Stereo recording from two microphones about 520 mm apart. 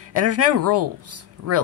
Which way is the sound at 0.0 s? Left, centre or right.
Right.